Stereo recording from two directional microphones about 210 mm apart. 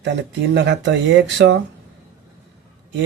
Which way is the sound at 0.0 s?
55° right (ahead or behind).